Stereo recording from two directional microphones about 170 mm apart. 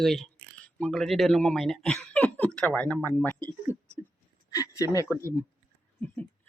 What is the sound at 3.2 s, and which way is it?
Speech, 20° right (ahead or behind).